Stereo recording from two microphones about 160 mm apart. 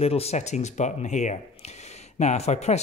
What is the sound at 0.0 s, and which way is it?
Speech, 40° left (ahead or behind).